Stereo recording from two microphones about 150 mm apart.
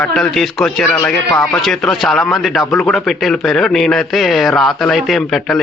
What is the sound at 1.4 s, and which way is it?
A man's voice, 5° left (ahead or behind).